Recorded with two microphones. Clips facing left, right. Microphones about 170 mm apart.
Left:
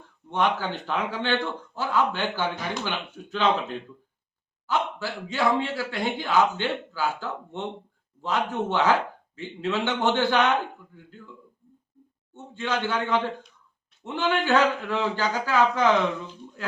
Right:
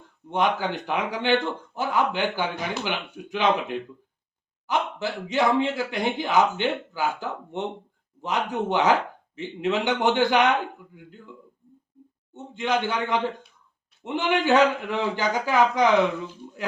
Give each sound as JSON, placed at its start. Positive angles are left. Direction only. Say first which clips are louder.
{"t": 0.3, "sound": "a man's voice", "louder": "right 1 dB", "side_deg": -15}
{"t": 12.3, "sound": "a man's voice", "louder": "right 4 dB", "side_deg": -20}